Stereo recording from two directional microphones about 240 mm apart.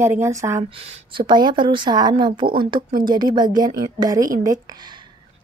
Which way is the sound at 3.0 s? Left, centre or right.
Centre.